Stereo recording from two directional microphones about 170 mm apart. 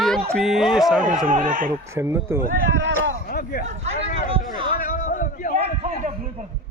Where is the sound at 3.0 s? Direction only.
60° left (ahead or behind).